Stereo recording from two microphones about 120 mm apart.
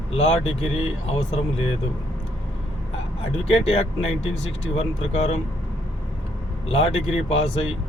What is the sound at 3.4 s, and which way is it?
Speech, 60° left (ahead or behind).